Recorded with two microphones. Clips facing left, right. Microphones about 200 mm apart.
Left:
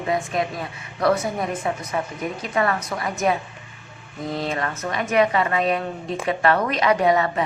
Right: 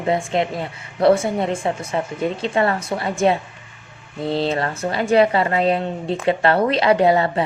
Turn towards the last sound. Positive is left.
turn(degrees=-30)  # may be behind; listen again after turning